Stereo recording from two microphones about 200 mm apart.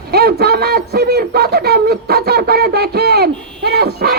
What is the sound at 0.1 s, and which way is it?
A man's voice, 50° right (ahead or behind).